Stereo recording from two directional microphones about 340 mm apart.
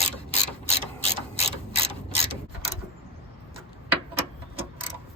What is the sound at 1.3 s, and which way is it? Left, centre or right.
Mechanisms, centre.